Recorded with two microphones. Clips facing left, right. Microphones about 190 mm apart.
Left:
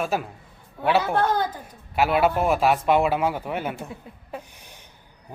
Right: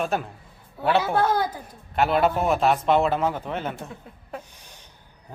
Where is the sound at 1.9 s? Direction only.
5° left (ahead or behind).